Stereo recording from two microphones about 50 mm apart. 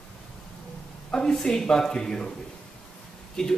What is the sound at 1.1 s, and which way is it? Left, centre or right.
Speech, centre.